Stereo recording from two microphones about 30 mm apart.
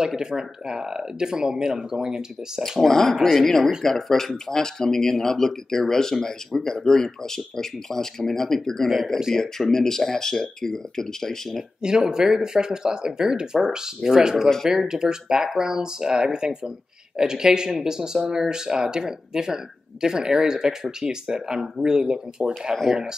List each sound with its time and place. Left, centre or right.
0.1 s speech: right
2.8 s speech: centre
9.3 s speech: centre
12.0 s speech: right